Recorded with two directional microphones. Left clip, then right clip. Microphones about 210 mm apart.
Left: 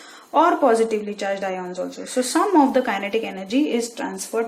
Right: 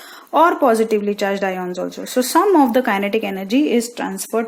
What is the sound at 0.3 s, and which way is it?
Speech, 55° right (ahead or behind).